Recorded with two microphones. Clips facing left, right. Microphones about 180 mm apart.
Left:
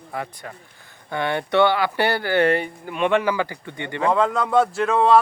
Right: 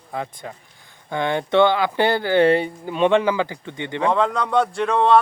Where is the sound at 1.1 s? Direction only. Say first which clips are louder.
Right 2 dB; 15° right (ahead or behind).